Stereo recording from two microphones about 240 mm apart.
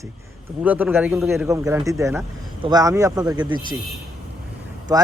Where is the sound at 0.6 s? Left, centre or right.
Centre.